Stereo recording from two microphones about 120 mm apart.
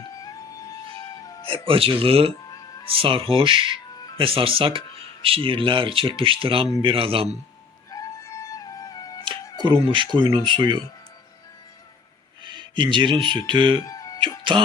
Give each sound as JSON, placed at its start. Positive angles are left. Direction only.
{"t": 0.7, "sound": "music", "side_deg": 30}
{"t": 1.5, "sound": "speech", "side_deg": -50}
{"t": 7.9, "sound": "music", "side_deg": 30}
{"t": 9.6, "sound": "speech", "side_deg": -45}
{"t": 12.4, "sound": "speech", "side_deg": -40}
{"t": 13.8, "sound": "music", "side_deg": 30}
{"t": 14.2, "sound": "cough", "side_deg": -40}